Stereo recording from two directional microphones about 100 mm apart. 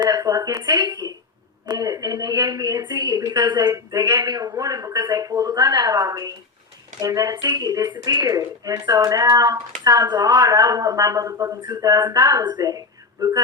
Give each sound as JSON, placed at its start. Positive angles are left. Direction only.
{"t": 0.0, "sound": "speech", "side_deg": -40}